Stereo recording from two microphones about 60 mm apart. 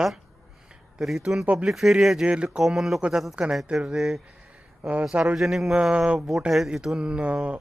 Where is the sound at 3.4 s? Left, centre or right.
Centre.